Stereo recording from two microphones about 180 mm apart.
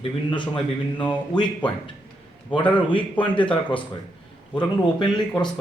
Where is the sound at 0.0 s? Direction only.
30° left (ahead or behind).